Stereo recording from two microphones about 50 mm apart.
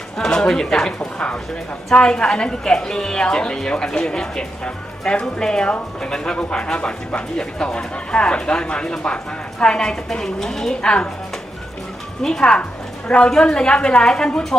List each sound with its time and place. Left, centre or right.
0.2 s a woman's voice: centre
12.2 s a woman's voice: centre